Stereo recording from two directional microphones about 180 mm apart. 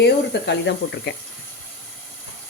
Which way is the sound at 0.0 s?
70° left (ahead or behind).